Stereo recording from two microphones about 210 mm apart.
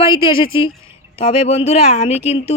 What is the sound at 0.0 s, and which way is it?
A woman's voice, 25° left (ahead or behind).